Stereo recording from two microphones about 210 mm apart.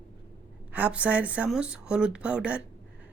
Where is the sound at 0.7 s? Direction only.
5° right (ahead or behind).